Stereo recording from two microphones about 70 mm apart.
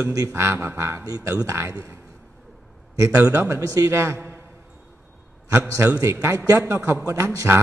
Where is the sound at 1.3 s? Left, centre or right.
Right.